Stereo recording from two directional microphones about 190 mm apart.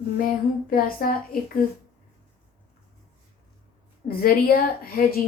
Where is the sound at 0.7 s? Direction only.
50° left (ahead or behind).